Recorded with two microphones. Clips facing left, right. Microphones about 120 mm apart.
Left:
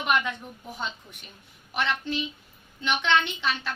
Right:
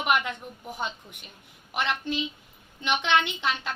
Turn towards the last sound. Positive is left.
turn(degrees=-15)  # may be behind; listen again after turning